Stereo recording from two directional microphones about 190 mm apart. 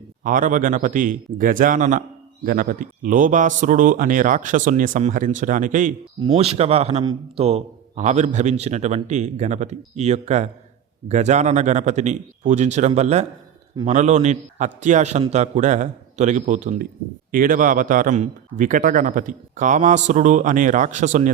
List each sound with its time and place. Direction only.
0.2 s a man's voice: 45° right (ahead or behind)